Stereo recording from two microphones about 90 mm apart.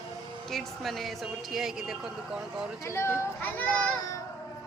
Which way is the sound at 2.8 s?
30° left (ahead or behind).